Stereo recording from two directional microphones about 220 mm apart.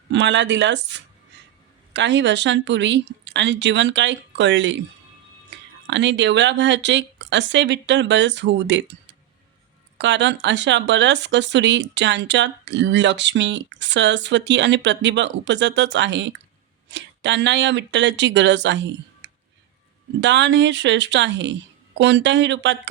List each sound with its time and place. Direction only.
0.1 s speech: 55° right (ahead or behind)
5.5 s a sound: 50° right (ahead or behind)
5.9 s speech: 55° right (ahead or behind)
10.0 s speech: 55° right (ahead or behind)